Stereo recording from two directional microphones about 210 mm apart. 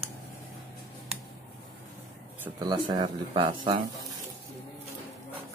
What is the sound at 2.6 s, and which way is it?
Speech, 20° right (ahead or behind).